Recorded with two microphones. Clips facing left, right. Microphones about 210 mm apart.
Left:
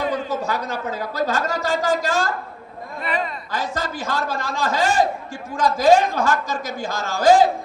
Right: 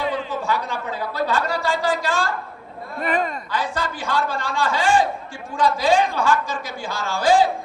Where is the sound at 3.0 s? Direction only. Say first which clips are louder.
Right 3 dB; 45° right (ahead or behind).